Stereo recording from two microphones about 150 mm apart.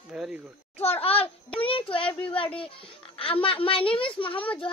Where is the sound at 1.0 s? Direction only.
40° left (ahead or behind).